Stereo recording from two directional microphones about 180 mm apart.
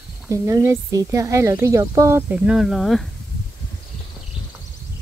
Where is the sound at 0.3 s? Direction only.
15° right (ahead or behind); by 3.1 s centre (ahead or behind).